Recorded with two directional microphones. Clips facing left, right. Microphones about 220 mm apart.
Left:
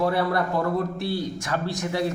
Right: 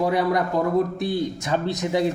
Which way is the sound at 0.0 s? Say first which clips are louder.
Right 2 dB; 15° right (ahead or behind).